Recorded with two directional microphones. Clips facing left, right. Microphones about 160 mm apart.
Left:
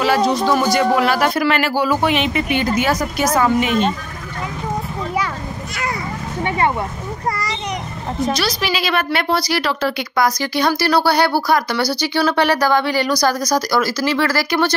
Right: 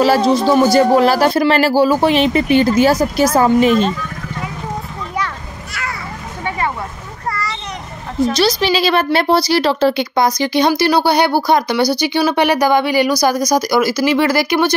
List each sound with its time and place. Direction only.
0.0 s speech: 30° right (ahead or behind)
8.4 s speech: 25° right (ahead or behind)